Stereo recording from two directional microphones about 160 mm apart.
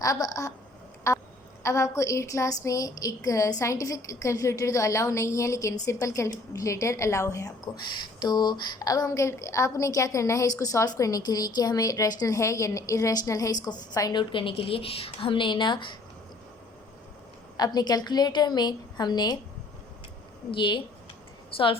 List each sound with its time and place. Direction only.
0.0 s a woman's voice: 20° left (ahead or behind)
17.6 s a woman's voice: 25° left (ahead or behind)
20.5 s a woman's voice: 30° left (ahead or behind)